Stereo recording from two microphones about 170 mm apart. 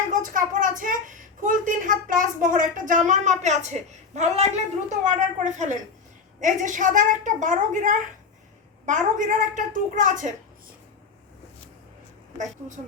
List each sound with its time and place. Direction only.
0.2 s a sound: 50° right (ahead or behind)
6.4 s a woman's voice: 50° right (ahead or behind)
12.4 s a woman's voice: 45° right (ahead or behind)